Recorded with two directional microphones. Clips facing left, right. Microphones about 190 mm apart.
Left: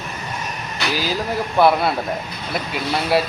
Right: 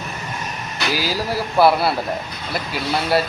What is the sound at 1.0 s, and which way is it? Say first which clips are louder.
Speech: left 1 dB; 5° right (ahead or behind).